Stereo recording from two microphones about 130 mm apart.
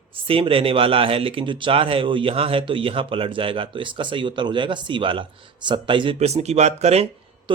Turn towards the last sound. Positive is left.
turn(degrees=-55)  # may be behind; listen again after turning